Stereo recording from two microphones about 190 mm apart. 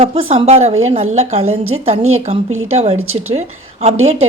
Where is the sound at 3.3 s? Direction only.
35° right (ahead or behind).